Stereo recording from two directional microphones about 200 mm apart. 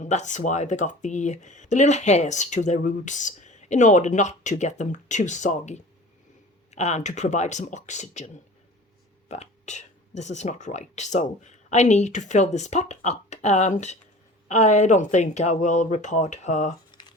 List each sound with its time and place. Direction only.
0.0 s speech: 35° left (ahead or behind)
9.3 s speech: 35° left (ahead or behind)
16.9 s a sound: 20° left (ahead or behind)